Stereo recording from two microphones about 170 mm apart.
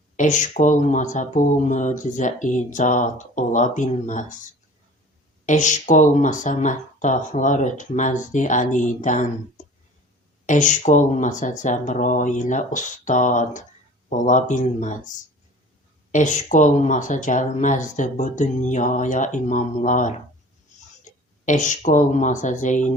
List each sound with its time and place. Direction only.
0.2 s speech: 45° left (ahead or behind)
5.5 s speech: 45° left (ahead or behind)
10.4 s speech: 45° left (ahead or behind)
16.1 s a woman's voice: 45° left (ahead or behind)